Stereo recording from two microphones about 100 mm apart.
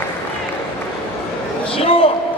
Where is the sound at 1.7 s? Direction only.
65° left (ahead or behind).